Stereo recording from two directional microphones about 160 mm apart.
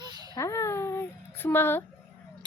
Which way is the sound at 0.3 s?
20° left (ahead or behind).